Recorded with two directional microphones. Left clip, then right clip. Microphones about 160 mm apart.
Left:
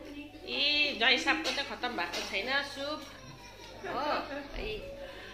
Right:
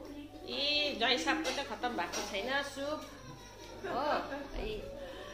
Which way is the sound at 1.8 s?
20° left (ahead or behind).